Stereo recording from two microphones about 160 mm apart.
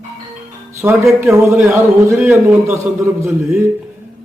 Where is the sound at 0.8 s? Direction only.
10° right (ahead or behind).